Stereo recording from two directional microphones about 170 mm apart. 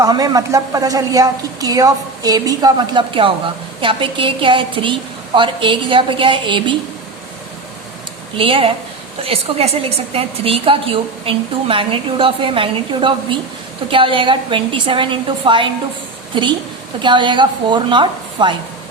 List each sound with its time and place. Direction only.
0.0 s a woman's voice: 20° right (ahead or behind)
8.4 s a woman's voice: 30° right (ahead or behind)